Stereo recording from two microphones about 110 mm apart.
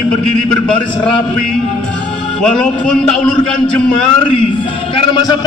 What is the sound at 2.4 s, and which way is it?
A man's voice, 10° left (ahead or behind).